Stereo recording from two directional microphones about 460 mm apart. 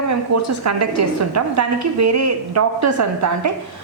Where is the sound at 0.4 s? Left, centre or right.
Right.